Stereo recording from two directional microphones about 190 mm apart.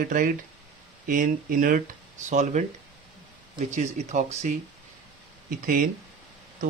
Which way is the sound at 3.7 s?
40° right (ahead or behind).